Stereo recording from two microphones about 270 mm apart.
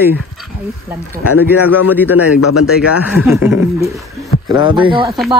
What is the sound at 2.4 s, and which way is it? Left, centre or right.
Speech, left.